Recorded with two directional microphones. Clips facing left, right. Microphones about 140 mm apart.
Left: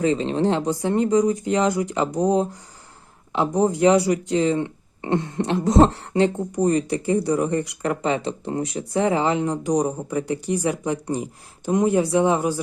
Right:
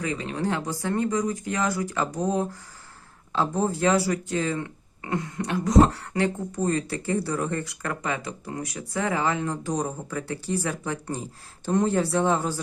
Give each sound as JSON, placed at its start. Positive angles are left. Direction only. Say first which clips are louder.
{"t": 0.0, "sound": "speech", "louder": "left 8 dB", "side_deg": 25}